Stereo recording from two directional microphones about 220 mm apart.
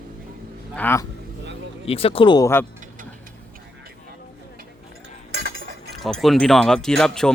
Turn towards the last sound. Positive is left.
turn(degrees=5)  # may be behind; listen again after turning